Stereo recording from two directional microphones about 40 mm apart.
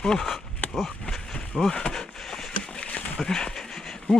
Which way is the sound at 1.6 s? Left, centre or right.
Centre.